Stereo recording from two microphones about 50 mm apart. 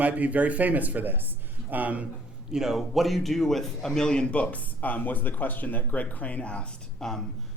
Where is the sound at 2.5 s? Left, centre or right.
Centre; by 6.7 s left.